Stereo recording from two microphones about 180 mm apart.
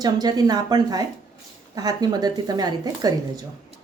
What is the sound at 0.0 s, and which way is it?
Speech, 20° right (ahead or behind).